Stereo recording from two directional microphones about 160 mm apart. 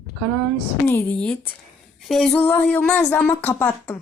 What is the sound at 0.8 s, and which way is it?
Speech, 10° left (ahead or behind).